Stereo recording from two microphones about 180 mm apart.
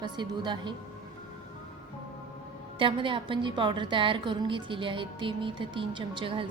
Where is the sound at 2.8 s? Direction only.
30° right (ahead or behind).